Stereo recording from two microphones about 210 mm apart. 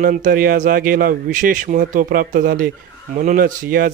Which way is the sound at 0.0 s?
40° right (ahead or behind).